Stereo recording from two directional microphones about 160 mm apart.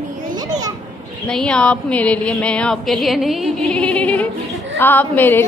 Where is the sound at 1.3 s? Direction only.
5° left (ahead or behind).